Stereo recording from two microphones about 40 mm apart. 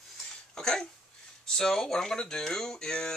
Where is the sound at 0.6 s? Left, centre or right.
Centre.